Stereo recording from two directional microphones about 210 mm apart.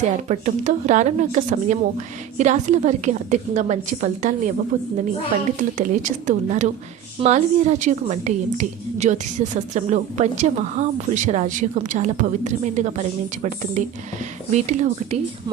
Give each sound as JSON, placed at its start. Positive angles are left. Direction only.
{"t": 0.0, "sound": "a woman's voice", "side_deg": -35}